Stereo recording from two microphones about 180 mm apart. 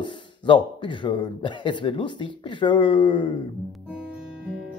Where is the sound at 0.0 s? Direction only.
25° left (ahead or behind).